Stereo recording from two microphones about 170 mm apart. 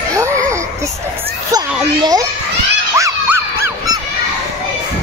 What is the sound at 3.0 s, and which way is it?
Dog, 15° right (ahead or behind).